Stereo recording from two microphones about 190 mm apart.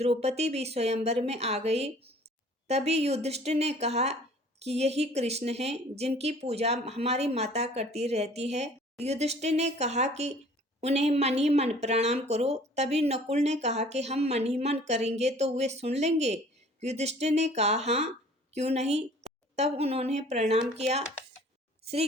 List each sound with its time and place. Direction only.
0.0 s a woman's voice: 35° right (ahead or behind)